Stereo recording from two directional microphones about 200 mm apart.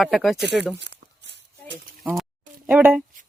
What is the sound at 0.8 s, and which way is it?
Tearing, 60° right (ahead or behind).